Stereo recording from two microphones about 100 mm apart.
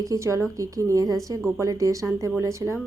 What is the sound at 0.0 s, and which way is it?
A woman's voice, 35° right (ahead or behind).